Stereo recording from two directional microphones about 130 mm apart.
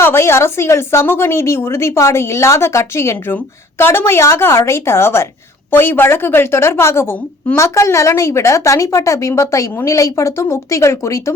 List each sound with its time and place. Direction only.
0.0 s a woman's voice: 20° left (ahead or behind)